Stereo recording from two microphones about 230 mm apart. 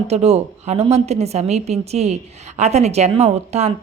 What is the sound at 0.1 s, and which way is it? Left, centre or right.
A woman's voice, right.